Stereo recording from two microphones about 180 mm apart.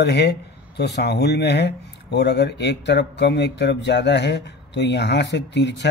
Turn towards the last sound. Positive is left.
turn(degrees=75)  # may be behind; listen again after turning